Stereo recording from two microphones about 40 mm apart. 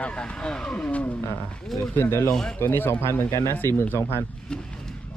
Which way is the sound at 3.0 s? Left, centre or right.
Left.